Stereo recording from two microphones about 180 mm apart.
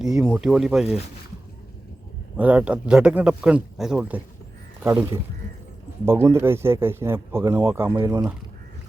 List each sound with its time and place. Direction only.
0.0 s speech: 5° right (ahead or behind)
2.4 s speech: 10° right (ahead or behind)